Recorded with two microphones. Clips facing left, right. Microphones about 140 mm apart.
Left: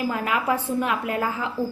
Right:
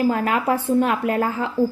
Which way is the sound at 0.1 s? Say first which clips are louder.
Right 4 dB; 35° right (ahead or behind).